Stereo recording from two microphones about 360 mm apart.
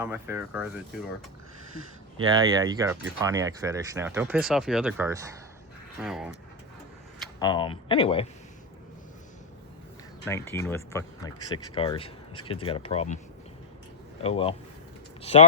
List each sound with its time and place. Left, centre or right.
0.0 s speech: centre
2.1 s speech: centre
7.3 s speech: centre
10.2 s speech: centre
14.2 s speech: centre